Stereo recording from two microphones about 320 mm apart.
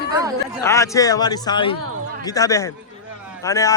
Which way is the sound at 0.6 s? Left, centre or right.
Centre.